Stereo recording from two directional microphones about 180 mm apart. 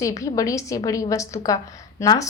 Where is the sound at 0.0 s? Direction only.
15° left (ahead or behind).